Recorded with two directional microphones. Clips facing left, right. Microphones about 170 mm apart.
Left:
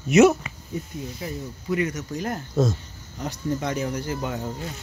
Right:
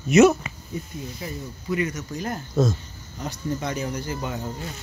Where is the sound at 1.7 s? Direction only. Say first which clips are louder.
Left 1 dB; 60° left (ahead or behind).